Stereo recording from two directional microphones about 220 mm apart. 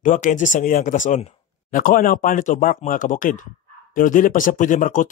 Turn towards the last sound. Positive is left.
turn(degrees=35)  # may be behind; listen again after turning